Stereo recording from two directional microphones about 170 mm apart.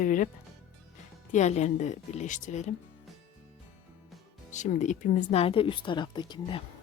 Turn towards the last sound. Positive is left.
turn(degrees=25)  # may be behind; listen again after turning